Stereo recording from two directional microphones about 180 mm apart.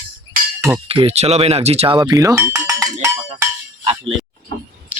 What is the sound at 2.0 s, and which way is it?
Cowbell, 20° right (ahead or behind).